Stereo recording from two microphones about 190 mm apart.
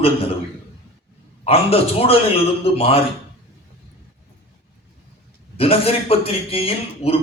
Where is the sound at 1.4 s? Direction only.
30° left (ahead or behind).